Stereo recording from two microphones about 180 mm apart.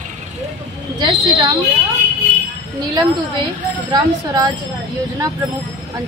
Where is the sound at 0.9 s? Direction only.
25° right (ahead or behind).